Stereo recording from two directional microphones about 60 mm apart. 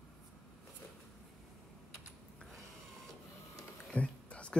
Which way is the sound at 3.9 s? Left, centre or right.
Left.